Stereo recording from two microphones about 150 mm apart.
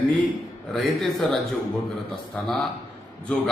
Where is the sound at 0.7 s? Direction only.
Centre (ahead or behind).